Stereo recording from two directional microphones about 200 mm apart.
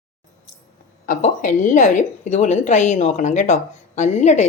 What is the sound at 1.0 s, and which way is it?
A woman's voice, 40° left (ahead or behind).